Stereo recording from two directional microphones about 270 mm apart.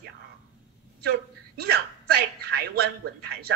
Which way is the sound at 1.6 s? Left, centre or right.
Right.